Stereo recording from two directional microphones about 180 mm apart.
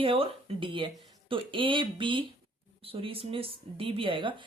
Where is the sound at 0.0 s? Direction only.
30° right (ahead or behind).